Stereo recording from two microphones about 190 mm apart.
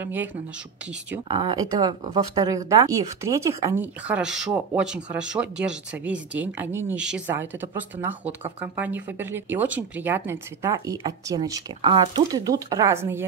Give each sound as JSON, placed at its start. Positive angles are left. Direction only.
{"t": 0.0, "sound": "speech", "side_deg": -10}
{"t": 1.3, "sound": "speech", "side_deg": -25}